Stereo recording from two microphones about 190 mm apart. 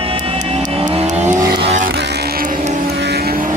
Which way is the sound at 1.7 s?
40° right (ahead or behind).